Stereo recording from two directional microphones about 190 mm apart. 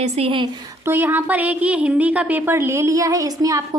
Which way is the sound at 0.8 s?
10° right (ahead or behind).